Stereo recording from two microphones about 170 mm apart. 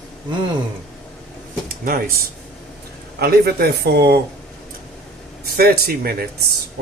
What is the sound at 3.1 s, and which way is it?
Speech, 65° right (ahead or behind).